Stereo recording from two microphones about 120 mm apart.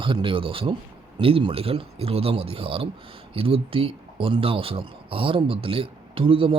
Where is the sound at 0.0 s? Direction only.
45° right (ahead or behind).